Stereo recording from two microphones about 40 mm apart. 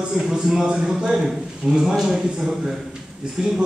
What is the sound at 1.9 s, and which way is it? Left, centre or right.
A man's voice, centre.